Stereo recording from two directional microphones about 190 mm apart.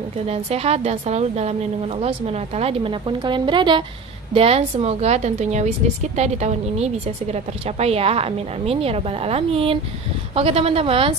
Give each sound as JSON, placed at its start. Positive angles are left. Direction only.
{"t": 0.3, "sound": "a woman's voice", "side_deg": -35}